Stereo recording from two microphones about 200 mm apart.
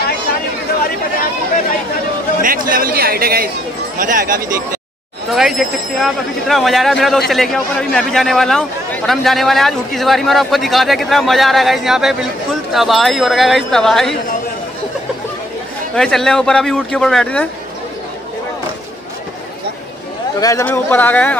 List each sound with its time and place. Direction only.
2.4 s speech: 45° right (ahead or behind)
5.3 s a man's voice: centre (ahead or behind)
15.9 s a man's voice: centre (ahead or behind)
20.3 s speech: 15° left (ahead or behind)